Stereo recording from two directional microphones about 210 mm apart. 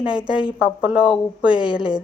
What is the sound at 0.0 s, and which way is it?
Speech, 5° right (ahead or behind).